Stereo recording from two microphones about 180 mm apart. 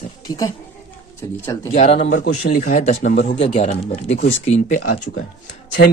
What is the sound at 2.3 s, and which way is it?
Speech, 40° left (ahead or behind).